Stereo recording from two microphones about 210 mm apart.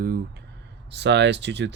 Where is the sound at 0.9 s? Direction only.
55° right (ahead or behind).